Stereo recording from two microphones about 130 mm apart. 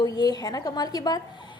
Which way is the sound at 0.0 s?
30° left (ahead or behind).